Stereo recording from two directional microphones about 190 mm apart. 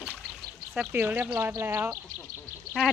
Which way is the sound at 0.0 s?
Centre (ahead or behind).